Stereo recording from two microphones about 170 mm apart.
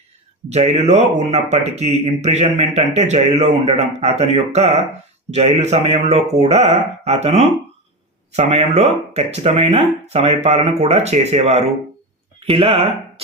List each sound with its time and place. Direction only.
0.5 s speech: 40° right (ahead or behind)